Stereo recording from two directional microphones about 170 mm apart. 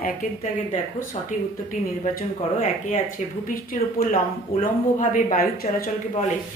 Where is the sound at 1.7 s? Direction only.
50° left (ahead or behind).